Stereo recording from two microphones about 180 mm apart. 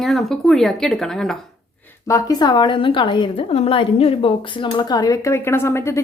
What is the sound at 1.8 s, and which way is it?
A woman's voice, 15° left (ahead or behind).